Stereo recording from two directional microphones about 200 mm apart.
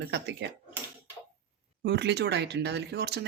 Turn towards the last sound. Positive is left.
turn(degrees=-55)  # may be behind; listen again after turning